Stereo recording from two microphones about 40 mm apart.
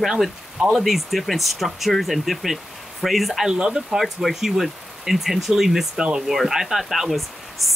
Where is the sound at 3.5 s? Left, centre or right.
Centre.